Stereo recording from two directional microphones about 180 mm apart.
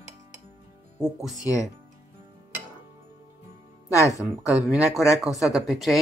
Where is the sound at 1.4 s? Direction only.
20° left (ahead or behind).